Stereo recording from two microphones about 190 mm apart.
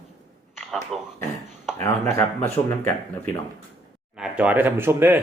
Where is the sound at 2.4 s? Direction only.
35° left (ahead or behind).